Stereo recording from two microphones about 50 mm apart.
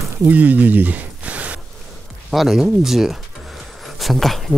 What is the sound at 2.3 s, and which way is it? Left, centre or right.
Speech, centre.